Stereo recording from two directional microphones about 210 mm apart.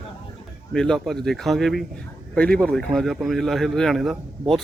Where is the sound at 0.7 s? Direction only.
Centre (ahead or behind).